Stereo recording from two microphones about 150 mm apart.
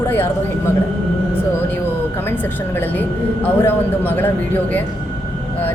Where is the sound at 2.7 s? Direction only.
10° left (ahead or behind).